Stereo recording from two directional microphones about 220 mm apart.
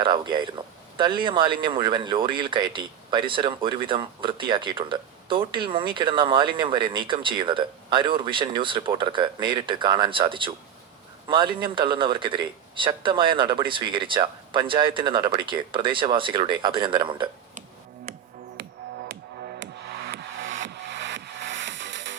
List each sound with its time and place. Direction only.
0.0 s speech: 20° right (ahead or behind)
19.9 s music: 45° right (ahead or behind)